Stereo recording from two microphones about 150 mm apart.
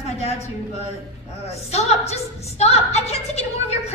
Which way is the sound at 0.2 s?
45° left (ahead or behind).